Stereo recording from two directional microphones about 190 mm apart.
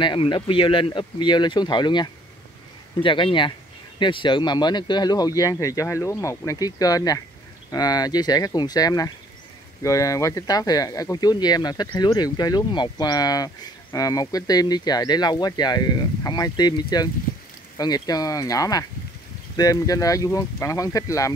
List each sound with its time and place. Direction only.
0.0 s speech: 25° left (ahead or behind)